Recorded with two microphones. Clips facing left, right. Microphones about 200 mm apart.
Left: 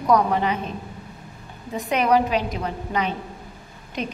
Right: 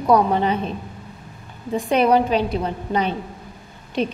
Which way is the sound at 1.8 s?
30° right (ahead or behind).